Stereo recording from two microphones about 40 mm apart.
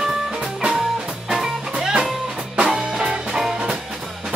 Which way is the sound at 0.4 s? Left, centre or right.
Right.